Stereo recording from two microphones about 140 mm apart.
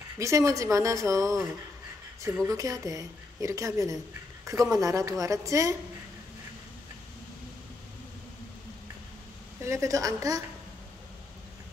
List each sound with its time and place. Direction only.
0.2 s a woman's voice: 20° right (ahead or behind)
9.6 s a woman's voice: 20° right (ahead or behind)